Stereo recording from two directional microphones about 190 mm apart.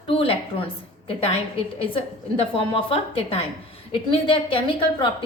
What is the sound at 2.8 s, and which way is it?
A woman's voice, 30° left (ahead or behind).